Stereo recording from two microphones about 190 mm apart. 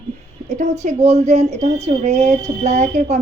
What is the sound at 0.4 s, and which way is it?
Speech, 35° right (ahead or behind).